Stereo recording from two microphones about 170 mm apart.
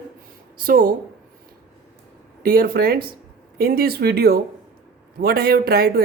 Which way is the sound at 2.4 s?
60° right (ahead or behind).